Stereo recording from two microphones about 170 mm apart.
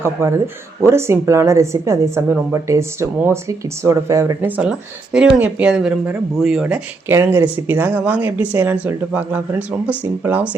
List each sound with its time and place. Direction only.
0.0 s speech: 15° right (ahead or behind)